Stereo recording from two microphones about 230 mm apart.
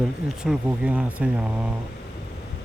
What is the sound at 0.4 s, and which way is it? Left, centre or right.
Speech, centre.